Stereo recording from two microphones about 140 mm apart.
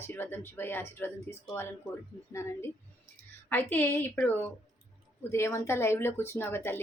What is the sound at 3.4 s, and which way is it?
Speech, 15° left (ahead or behind).